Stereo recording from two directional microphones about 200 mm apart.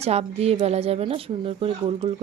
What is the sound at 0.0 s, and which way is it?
Speech, 30° right (ahead or behind).